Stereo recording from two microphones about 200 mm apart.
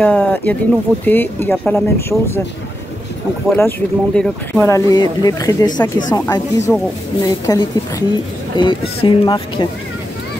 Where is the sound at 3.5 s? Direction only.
10° left (ahead or behind).